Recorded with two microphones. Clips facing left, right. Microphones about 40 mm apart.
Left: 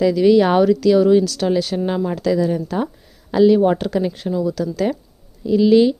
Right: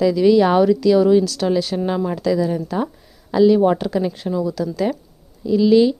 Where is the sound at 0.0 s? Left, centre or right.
Centre.